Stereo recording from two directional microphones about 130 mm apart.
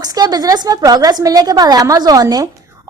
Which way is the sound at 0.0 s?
30° right (ahead or behind).